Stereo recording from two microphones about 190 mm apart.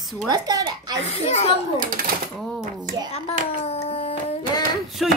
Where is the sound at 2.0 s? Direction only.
50° right (ahead or behind).